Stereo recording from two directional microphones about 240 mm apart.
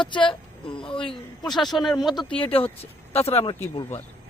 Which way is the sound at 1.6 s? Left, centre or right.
Centre.